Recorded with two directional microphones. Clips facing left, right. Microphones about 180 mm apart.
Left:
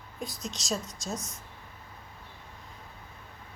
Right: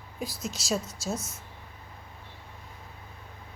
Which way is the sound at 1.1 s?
15° left (ahead or behind).